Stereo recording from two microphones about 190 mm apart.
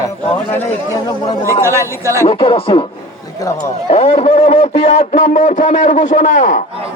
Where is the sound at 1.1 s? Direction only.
20° left (ahead or behind).